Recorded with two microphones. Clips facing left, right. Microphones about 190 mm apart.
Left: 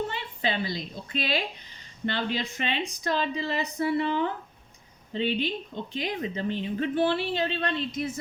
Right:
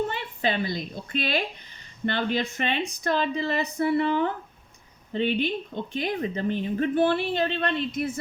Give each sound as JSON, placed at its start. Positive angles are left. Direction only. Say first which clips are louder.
{"t": 0.1, "sound": "a woman's voice", "louder": "right 3 dB", "side_deg": -50}